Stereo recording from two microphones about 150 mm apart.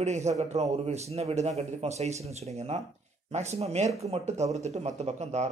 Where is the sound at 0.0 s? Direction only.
50° right (ahead or behind).